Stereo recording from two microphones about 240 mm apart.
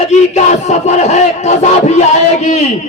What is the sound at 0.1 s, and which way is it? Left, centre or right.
A man's voice, left.